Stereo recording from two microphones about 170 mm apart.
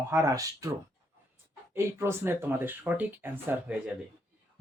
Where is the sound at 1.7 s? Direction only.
15° right (ahead or behind).